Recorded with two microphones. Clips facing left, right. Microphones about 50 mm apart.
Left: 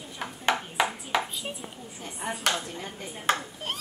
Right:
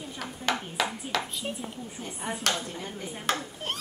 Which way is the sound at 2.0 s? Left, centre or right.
Left.